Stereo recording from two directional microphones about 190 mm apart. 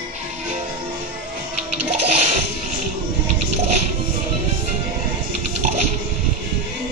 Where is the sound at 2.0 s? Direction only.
35° right (ahead or behind).